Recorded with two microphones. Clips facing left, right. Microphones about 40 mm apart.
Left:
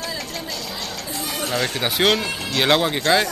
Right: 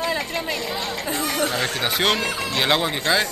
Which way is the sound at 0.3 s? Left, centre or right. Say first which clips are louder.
Right 4 dB; right.